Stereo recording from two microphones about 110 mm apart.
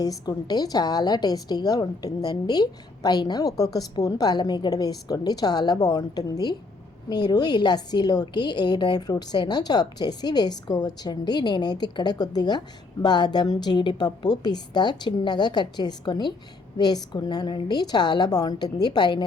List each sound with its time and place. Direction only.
0.0 s a woman's voice: 35° left (ahead or behind)